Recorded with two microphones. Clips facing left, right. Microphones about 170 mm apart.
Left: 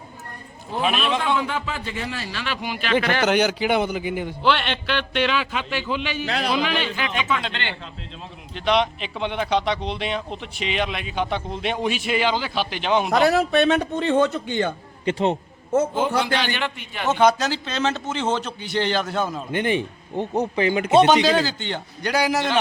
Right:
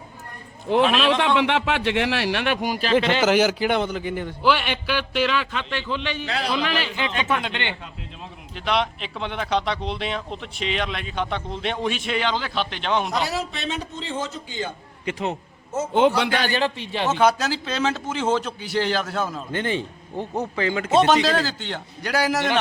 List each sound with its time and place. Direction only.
0.9 s a man's voice: 80° right; by 2.9 s 40° right (ahead or behind)
3.0 s speech: 20° right (ahead or behind)
3.2 s a man's voice: centre (ahead or behind)
4.4 s speech: 10° right (ahead or behind)
7.4 s speech: 15° right (ahead or behind)
8.5 s speech: centre (ahead or behind)
13.1 s a man's voice: 60° left (ahead or behind)
15.0 s a man's voice: 30° left (ahead or behind)
16.0 s a man's voice: 70° right (ahead or behind)
16.4 s a man's voice: 35° right (ahead or behind)
17.2 s speech: 5° right (ahead or behind)
19.5 s a man's voice: 15° left (ahead or behind)
21.2 s speech: centre (ahead or behind)